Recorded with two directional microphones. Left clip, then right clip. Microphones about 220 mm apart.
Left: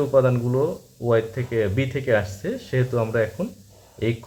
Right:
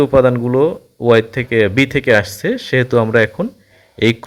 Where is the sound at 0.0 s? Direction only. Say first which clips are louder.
Right 8 dB; 35° right (ahead or behind).